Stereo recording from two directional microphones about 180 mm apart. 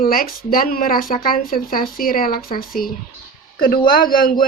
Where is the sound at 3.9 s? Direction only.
50° left (ahead or behind).